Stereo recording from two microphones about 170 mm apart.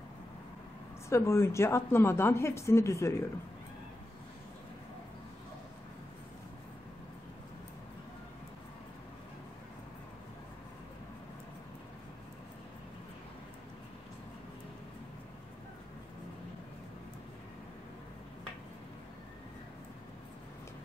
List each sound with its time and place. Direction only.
1.0 s a woman's voice: 15° left (ahead or behind)